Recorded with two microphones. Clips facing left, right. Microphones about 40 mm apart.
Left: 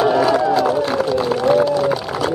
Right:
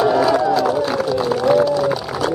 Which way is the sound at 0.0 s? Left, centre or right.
Centre.